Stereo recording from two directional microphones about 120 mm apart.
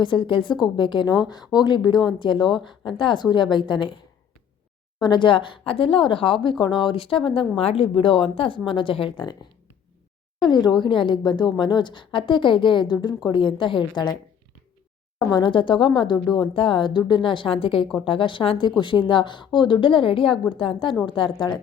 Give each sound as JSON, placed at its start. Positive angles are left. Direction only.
{"t": 0.0, "sound": "a woman's voice", "side_deg": 40}
{"t": 1.0, "sound": "speech", "side_deg": -5}
{"t": 1.5, "sound": "a woman's voice", "side_deg": 35}
{"t": 4.9, "sound": "speech", "side_deg": 40}
{"t": 10.5, "sound": "a woman's voice", "side_deg": 35}
{"t": 15.3, "sound": "a woman's voice", "side_deg": 40}